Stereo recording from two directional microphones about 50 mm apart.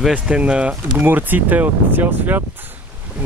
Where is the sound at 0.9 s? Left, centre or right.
Right.